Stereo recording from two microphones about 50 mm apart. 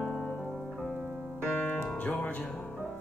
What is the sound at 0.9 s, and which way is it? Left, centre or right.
Music, centre.